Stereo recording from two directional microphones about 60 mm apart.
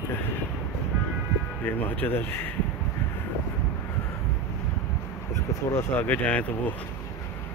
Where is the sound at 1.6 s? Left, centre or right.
Left.